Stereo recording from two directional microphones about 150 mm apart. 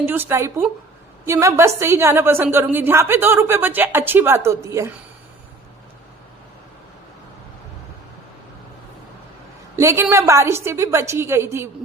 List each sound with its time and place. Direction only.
0.0 s a woman's voice: 15° right (ahead or behind)
9.7 s a woman's voice: 15° right (ahead or behind)